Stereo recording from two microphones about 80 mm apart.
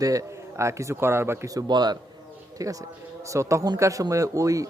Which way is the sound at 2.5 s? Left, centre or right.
Right.